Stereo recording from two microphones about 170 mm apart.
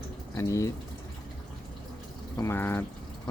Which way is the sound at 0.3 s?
20° left (ahead or behind).